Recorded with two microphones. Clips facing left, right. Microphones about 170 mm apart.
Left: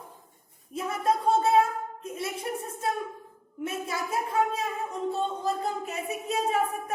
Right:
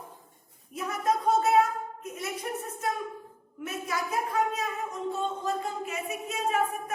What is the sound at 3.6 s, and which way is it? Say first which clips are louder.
A woman's voice: left 1 dB; 30° left (ahead or behind).